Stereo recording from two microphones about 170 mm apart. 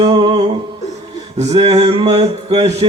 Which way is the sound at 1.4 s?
35° right (ahead or behind).